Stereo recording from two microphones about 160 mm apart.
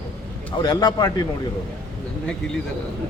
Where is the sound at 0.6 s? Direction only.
25° left (ahead or behind).